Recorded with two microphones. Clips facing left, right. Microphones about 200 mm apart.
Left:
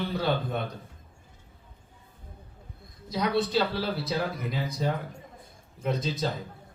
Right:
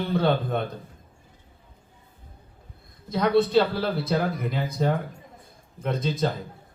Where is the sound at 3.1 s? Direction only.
55° right (ahead or behind).